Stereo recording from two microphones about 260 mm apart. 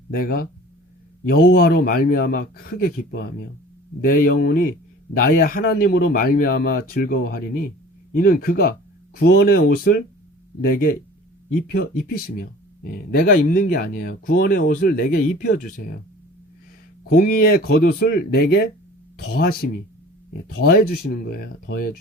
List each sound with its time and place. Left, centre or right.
0.1 s speech: left
17.0 s speech: left
20.6 s speech: left